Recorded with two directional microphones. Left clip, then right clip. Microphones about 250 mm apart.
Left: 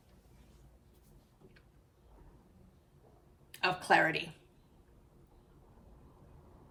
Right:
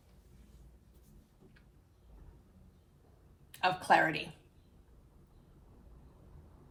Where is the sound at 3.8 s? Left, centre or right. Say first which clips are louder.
Even; centre.